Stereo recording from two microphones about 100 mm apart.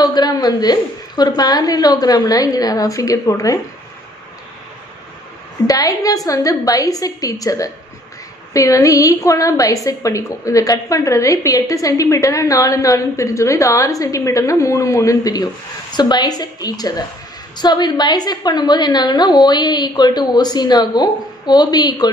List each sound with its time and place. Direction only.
0.0 s a woman's voice: 45° left (ahead or behind)
5.7 s a woman's voice: 35° left (ahead or behind)